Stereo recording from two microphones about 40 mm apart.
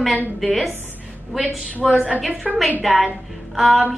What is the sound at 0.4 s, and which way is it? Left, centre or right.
Speech, centre.